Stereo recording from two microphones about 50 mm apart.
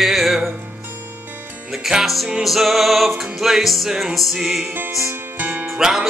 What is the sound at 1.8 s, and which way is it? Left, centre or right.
Music, centre.